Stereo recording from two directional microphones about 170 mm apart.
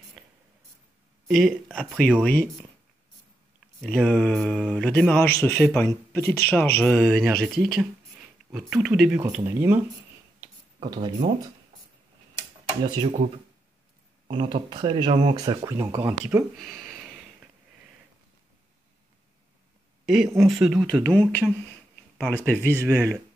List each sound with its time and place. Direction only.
1.2 s speech: centre (ahead or behind)
3.8 s speech: 5° left (ahead or behind); by 9.8 s 15° right (ahead or behind)
10.8 s speech: 25° right (ahead or behind)
12.8 s speech: 25° right (ahead or behind)
14.3 s speech: 30° right (ahead or behind)
16.5 s a sound: centre (ahead or behind)
20.3 s speech: centre (ahead or behind)
22.7 s speech: 15° right (ahead or behind)